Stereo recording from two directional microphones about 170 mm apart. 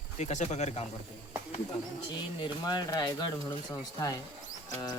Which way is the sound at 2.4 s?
25° left (ahead or behind).